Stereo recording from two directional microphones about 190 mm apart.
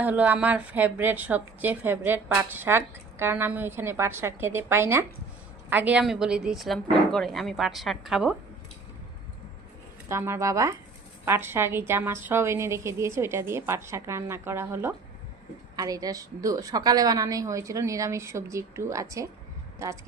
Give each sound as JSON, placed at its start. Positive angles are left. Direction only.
{"t": 0.0, "sound": "a woman's voice", "side_deg": -10}
{"t": 10.1, "sound": "a woman's voice", "side_deg": -15}